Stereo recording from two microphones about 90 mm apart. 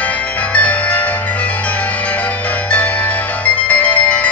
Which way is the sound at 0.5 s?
15° left (ahead or behind).